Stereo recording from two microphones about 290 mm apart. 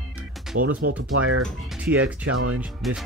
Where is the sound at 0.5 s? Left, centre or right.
Right.